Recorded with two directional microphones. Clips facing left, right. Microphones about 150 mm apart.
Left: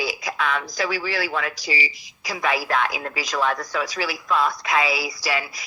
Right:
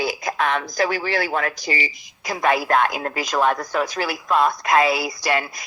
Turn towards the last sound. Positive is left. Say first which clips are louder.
# right 4 dB
turn(degrees=-50)  # may be behind; listen again after turning